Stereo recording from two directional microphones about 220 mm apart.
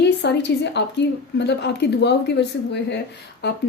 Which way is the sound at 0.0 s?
50° left (ahead or behind).